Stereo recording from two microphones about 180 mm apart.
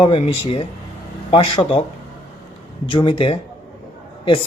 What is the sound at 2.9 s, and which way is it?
Speech, 30° left (ahead or behind).